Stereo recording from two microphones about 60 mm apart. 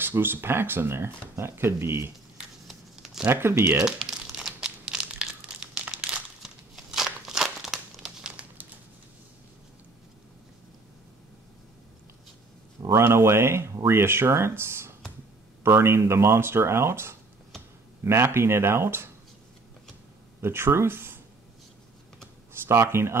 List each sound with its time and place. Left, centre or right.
0.0 s speech: right
3.3 s speech: right
3.7 s crumpling: centre
6.4 s a sound: centre
7.1 s crumpling: centre
12.8 s speech: right
20.3 s speech: right
22.5 s speech: right